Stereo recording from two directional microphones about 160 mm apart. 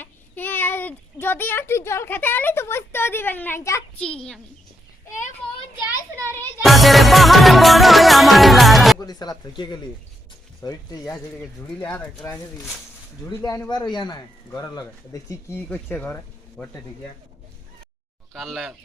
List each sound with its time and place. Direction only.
0.0 s a child's voice: 10° left (ahead or behind)
4.0 s a child's voice: 5° left (ahead or behind)
5.4 s children playing: centre (ahead or behind)
6.1 s music: 20° right (ahead or behind)
6.6 s music: centre (ahead or behind)
9.0 s speech: 25° left (ahead or behind)
18.3 s a child's voice: centre (ahead or behind)